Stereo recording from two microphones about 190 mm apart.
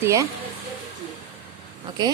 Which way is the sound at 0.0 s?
15° right (ahead or behind).